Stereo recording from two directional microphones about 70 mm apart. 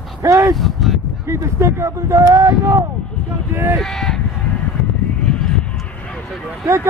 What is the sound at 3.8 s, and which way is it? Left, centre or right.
Speech, centre.